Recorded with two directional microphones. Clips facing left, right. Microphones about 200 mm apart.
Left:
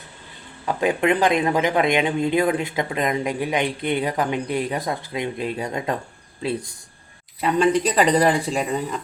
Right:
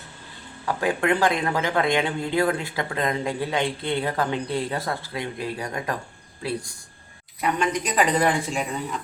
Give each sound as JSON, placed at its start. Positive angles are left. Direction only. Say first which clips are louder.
{"t": 0.6, "sound": "speech", "louder": "left 3 dB", "side_deg": 20}